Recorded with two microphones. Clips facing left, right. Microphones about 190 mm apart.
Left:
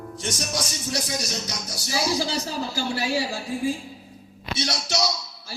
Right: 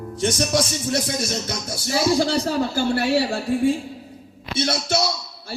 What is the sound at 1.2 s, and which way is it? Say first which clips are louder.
A man's voice: right 5 dB; 55° right (ahead or behind).